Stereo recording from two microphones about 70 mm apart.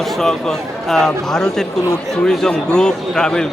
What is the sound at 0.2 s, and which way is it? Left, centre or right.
A man's voice, centre.